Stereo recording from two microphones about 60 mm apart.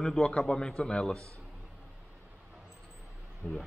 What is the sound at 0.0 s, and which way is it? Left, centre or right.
Speech, centre.